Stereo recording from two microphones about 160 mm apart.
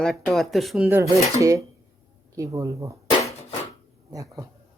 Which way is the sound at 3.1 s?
35° left (ahead or behind).